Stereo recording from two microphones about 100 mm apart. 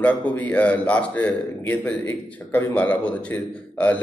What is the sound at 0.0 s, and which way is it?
A man's voice, 15° left (ahead or behind).